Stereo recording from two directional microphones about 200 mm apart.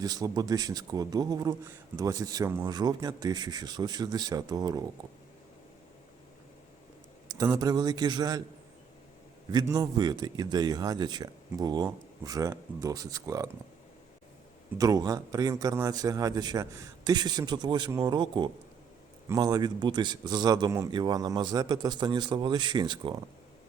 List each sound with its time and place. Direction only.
0.0 s speech: 20° right (ahead or behind)
7.3 s speech: 20° right (ahead or behind)
9.5 s speech: 20° right (ahead or behind)
14.8 s speech: 20° right (ahead or behind)